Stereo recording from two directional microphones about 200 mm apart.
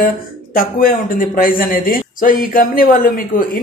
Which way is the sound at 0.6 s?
45° left (ahead or behind).